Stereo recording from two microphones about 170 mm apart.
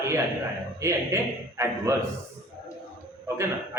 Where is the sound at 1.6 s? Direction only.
15° right (ahead or behind).